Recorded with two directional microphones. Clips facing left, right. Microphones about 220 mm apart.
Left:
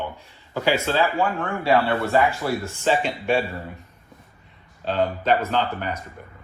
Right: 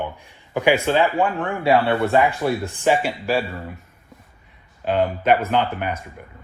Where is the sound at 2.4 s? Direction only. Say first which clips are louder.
Right 3 dB; 15° right (ahead or behind).